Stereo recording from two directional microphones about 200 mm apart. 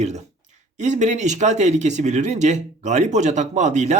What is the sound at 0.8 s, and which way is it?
Speech, 35° right (ahead or behind).